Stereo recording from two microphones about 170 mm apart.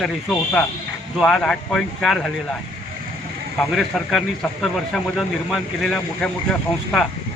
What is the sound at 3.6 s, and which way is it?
Speech, centre (ahead or behind).